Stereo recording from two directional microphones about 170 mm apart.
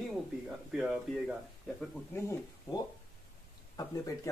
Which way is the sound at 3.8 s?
20° left (ahead or behind).